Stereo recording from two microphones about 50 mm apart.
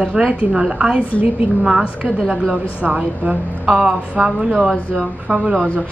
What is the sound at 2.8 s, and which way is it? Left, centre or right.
A woman's voice, right.